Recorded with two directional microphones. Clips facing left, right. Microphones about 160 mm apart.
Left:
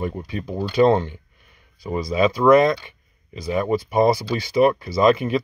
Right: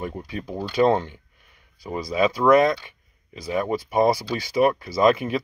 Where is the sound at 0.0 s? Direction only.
5° right (ahead or behind).